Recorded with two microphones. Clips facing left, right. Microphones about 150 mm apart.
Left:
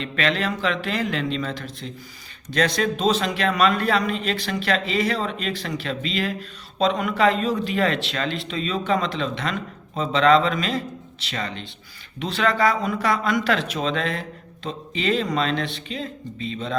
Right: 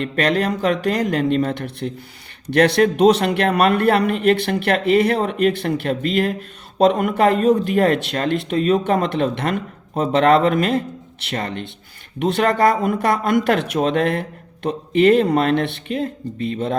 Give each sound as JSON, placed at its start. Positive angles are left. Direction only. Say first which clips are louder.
{"t": 0.0, "sound": "speech", "louder": "right 5 dB", "side_deg": -50}
{"t": 1.5, "sound": "speech", "louder": "right 7 dB", "side_deg": -60}